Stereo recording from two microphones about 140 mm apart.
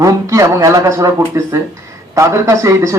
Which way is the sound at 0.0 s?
20° right (ahead or behind).